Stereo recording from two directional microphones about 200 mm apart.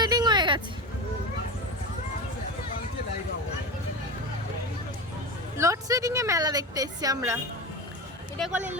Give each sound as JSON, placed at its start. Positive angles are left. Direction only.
{"t": 0.0, "sound": "vehicle", "side_deg": -20}
{"t": 5.5, "sound": "a sound", "side_deg": -15}
{"t": 8.4, "sound": "speech", "side_deg": -5}